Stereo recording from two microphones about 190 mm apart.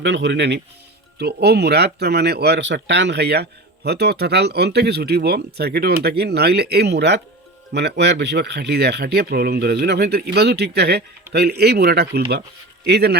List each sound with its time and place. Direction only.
0.0 s a man's voice: 65° right (ahead or behind)